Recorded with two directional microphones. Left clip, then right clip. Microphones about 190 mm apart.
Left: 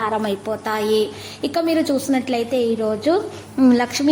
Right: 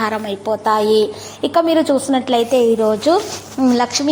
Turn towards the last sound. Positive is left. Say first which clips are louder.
# right 1 dB
turn(degrees=10)  # may be behind; listen again after turning